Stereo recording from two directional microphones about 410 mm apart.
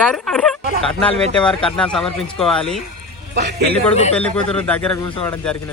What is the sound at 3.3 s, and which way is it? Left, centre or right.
Speech, right.